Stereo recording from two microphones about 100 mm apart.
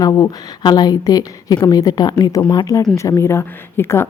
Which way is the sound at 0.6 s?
45° left (ahead or behind).